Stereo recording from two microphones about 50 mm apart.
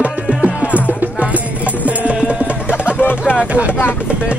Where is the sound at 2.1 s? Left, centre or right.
Right.